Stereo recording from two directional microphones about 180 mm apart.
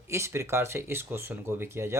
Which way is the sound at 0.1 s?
15° right (ahead or behind).